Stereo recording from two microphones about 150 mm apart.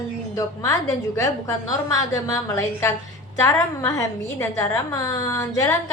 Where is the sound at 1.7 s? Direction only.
20° left (ahead or behind).